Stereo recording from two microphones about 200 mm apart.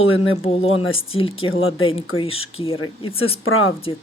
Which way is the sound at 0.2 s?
30° left (ahead or behind).